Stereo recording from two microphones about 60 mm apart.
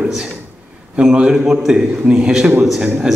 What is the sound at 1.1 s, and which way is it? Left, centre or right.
A man's voice, centre.